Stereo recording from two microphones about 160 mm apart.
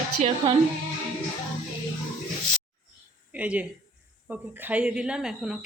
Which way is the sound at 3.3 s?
10° right (ahead or behind).